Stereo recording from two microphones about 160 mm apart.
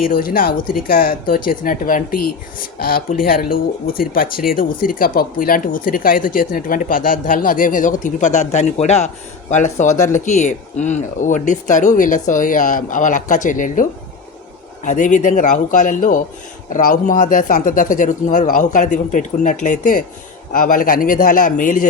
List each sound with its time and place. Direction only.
0.0 s a man's voice: 65° left (ahead or behind)
14.8 s a man's voice: 50° left (ahead or behind)